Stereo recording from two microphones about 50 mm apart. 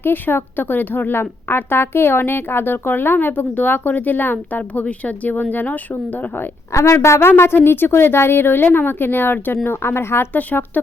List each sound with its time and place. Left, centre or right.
0.0 s a woman's voice: left
6.7 s a woman's voice: left
10.3 s a woman's voice: left